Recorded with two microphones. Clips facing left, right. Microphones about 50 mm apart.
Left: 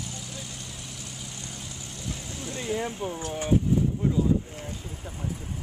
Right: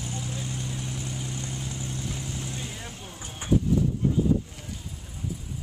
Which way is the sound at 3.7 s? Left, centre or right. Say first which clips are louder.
Even; left.